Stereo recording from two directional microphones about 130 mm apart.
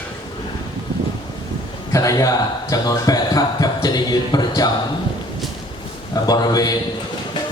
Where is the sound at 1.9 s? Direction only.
25° left (ahead or behind).